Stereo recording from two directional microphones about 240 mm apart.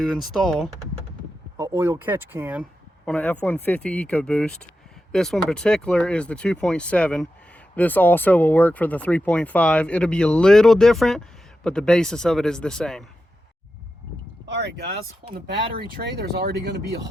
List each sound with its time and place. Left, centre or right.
0.0 s speech: centre
1.5 s speech: centre
3.1 s speech: centre
14.4 s speech: right
16.0 s speech: right